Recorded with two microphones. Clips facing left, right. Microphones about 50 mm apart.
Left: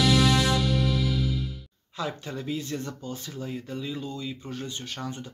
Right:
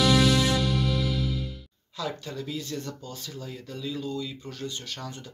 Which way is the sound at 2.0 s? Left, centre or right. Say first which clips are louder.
Left 1 dB; left.